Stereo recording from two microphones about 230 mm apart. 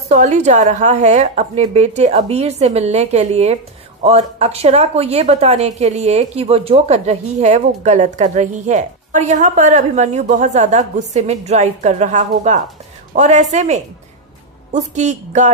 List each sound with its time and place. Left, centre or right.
0.1 s speech: right